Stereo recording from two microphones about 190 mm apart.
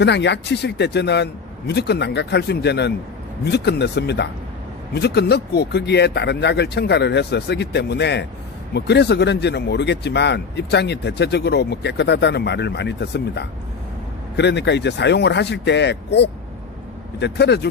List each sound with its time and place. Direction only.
0.0 s speech: 65° left (ahead or behind)